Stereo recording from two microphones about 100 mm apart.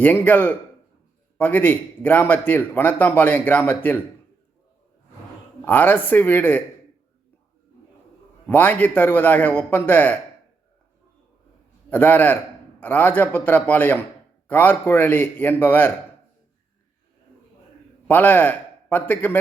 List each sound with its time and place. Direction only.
0.0 s a man's voice: 20° left (ahead or behind)
5.6 s a man's voice: 20° left (ahead or behind)
8.4 s a man's voice: 20° left (ahead or behind)
11.9 s a man's voice: 15° left (ahead or behind)
18.1 s a man's voice: 15° left (ahead or behind)